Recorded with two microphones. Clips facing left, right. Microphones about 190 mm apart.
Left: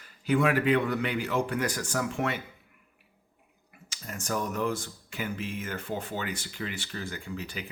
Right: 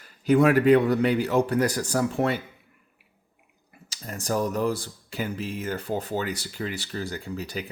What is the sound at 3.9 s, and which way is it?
Speech, 35° right (ahead or behind).